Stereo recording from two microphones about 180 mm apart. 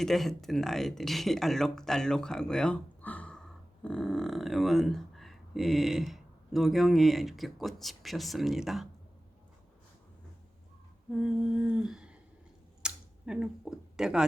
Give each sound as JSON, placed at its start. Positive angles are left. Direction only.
{"t": 0.0, "sound": "speech", "side_deg": 0}
{"t": 11.5, "sound": "speech", "side_deg": -5}
{"t": 12.8, "sound": "a sound", "side_deg": -5}